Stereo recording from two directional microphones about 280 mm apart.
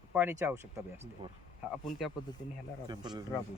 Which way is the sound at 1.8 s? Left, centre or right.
Centre.